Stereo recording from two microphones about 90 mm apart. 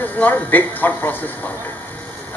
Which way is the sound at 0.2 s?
20° left (ahead or behind).